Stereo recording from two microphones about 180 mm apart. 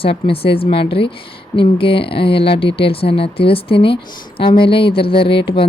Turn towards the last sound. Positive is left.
turn(degrees=30)  # may be behind; listen again after turning